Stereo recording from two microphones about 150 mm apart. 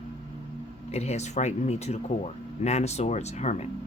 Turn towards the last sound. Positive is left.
turn(degrees=45)  # may be behind; listen again after turning